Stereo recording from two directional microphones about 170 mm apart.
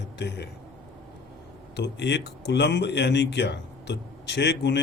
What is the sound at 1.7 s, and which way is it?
Speech, 85° left.